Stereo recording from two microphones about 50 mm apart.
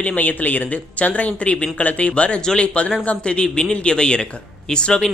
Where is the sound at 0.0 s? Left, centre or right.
Left.